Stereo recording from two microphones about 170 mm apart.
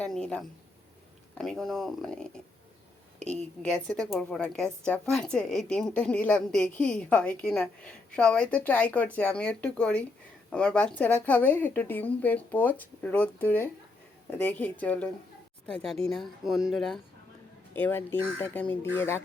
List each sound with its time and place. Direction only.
0.0 s a woman's voice: 5° left (ahead or behind)
3.6 s a woman's voice: 5° left (ahead or behind)